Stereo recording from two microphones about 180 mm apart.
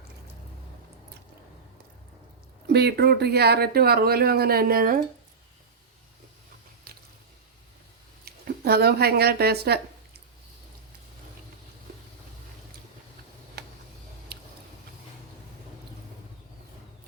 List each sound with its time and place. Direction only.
2.7 s speech: 65° right (ahead or behind)
8.2 s speech: 60° right (ahead or behind)
14.3 s a sound: 60° right (ahead or behind)